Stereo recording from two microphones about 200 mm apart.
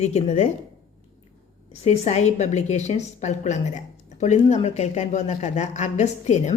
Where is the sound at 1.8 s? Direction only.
30° left (ahead or behind).